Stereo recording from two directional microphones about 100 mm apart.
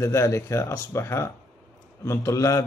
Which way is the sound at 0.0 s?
30° left (ahead or behind).